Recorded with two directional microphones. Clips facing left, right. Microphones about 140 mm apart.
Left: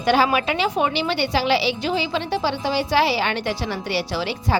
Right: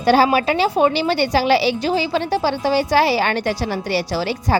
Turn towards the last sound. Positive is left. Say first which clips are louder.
# right 3 dB
turn(degrees=-40)  # may be behind; listen again after turning